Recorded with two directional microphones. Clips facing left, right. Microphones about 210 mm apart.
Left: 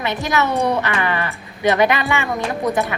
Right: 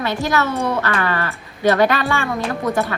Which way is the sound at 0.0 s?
20° left (ahead or behind).